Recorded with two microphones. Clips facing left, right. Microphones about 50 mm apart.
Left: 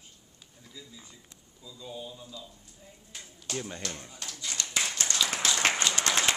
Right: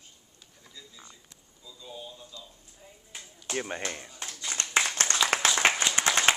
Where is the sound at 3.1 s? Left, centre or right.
Centre.